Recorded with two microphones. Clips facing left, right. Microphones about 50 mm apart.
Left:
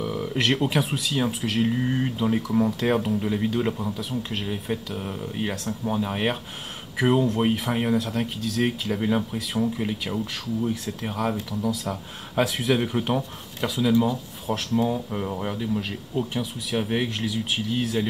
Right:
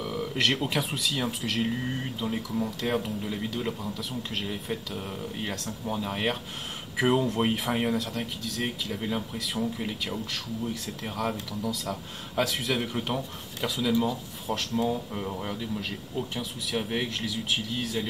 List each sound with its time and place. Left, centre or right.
0.0 s speech: centre
2.1 s speech: left
4.1 s speech: centre
7.0 s speech: centre
8.5 s speech: left
8.9 s speech: centre